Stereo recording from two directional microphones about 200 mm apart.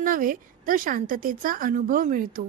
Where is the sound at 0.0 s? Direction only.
45° right (ahead or behind).